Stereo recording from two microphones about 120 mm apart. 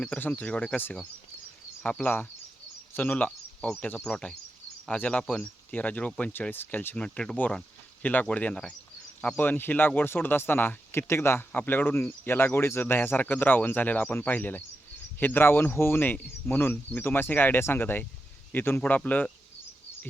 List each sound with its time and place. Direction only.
0.0 s speech: 10° left (ahead or behind)